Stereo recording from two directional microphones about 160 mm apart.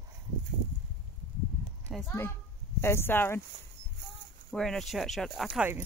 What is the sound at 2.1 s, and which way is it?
Speech, 15° left (ahead or behind).